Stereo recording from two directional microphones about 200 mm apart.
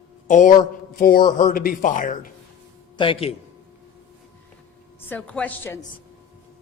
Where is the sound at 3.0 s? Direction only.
25° left (ahead or behind).